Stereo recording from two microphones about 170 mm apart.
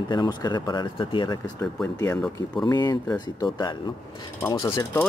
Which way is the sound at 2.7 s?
25° left (ahead or behind).